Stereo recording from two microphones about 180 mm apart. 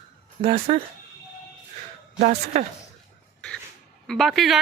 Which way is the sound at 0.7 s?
35° right (ahead or behind).